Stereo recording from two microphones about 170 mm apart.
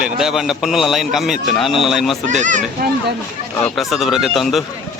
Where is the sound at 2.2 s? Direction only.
45° right (ahead or behind).